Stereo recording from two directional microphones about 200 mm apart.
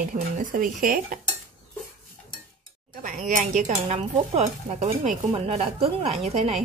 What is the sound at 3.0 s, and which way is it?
Speech, 40° right (ahead or behind).